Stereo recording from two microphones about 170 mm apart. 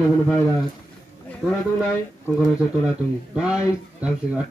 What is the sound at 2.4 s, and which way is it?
Speech, 5° right (ahead or behind).